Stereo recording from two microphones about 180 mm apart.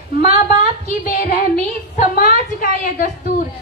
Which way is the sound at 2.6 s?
50° left (ahead or behind).